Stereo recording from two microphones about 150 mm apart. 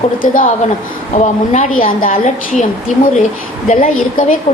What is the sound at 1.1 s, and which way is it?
Speech, 60° left (ahead or behind).